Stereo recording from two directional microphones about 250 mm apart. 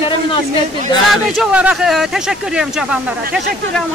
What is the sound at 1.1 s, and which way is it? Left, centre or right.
Speech, centre.